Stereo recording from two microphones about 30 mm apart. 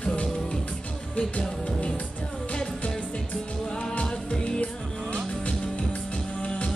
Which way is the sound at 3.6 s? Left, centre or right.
Left.